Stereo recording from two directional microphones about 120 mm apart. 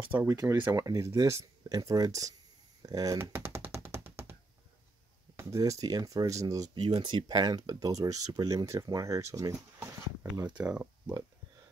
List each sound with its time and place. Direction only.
0.3 s speech: 25° right (ahead or behind)
2.8 s a sound: 30° right (ahead or behind)
5.3 s speech: 25° right (ahead or behind)
10.6 s speech: 15° right (ahead or behind)